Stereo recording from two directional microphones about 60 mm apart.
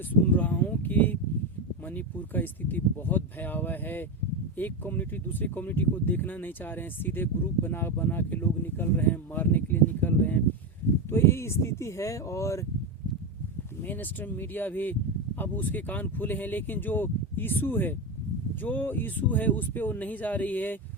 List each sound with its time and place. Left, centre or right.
0.1 s speech: left
11.1 s speech: left
13.8 s speech: left